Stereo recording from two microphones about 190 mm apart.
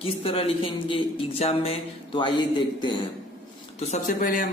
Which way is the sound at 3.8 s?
40° left (ahead or behind).